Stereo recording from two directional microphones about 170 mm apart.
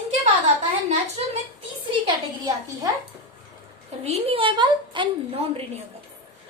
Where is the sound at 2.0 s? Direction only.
25° right (ahead or behind).